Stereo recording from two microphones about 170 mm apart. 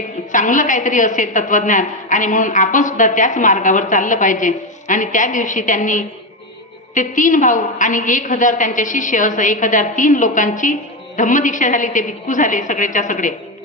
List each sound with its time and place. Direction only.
0.3 s a woman's voice: 50° left (ahead or behind)